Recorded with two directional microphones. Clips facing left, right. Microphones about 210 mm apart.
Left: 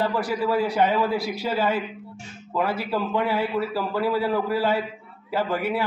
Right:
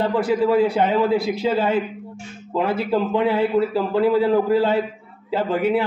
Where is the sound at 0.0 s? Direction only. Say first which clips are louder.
Right 5 dB; 25° right (ahead or behind).